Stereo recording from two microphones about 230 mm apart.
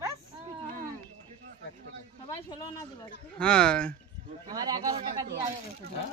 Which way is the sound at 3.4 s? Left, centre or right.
Centre.